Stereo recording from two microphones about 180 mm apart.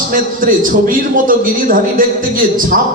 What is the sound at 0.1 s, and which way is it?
A man's voice, 50° right (ahead or behind).